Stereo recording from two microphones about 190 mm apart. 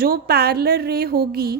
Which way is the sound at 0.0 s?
55° right (ahead or behind).